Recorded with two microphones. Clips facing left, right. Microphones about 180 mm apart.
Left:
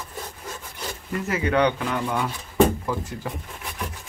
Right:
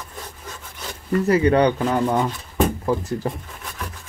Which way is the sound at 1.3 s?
35° right (ahead or behind).